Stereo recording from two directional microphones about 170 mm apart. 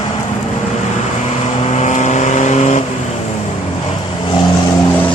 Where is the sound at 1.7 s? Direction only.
45° left (ahead or behind).